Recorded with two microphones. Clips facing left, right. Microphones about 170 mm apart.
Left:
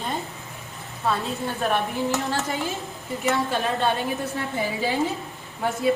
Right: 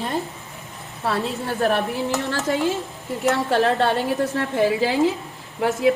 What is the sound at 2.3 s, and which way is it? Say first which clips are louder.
A woman's voice: right 5 dB; 80° right.